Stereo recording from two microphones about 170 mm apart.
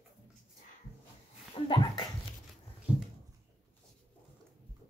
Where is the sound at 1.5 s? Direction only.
25° left (ahead or behind).